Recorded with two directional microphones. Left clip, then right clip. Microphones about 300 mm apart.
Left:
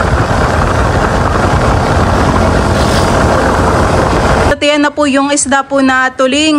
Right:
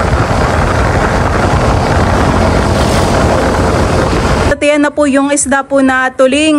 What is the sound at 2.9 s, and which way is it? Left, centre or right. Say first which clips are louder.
Vehicle: left 1 dB; centre.